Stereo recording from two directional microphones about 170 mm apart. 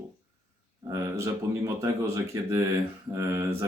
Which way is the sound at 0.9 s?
15° right (ahead or behind).